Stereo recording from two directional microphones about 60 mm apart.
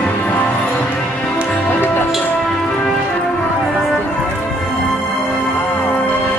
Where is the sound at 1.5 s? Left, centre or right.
Left.